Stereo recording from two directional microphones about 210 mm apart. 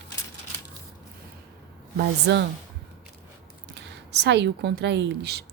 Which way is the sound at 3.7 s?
55° right (ahead or behind).